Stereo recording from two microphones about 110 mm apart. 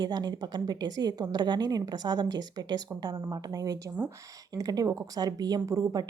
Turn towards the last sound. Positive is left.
turn(degrees=-30)  # may be behind; listen again after turning